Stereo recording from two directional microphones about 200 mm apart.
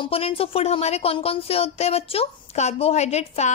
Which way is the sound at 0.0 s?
25° left (ahead or behind).